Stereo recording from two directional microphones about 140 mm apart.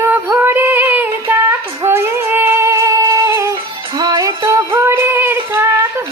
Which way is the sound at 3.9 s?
25° right (ahead or behind).